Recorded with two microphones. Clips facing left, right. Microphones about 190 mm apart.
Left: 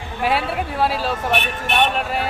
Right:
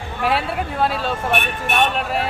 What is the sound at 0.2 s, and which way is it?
A man's voice, centre (ahead or behind).